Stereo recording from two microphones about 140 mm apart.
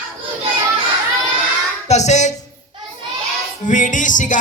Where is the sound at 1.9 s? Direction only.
55° left (ahead or behind).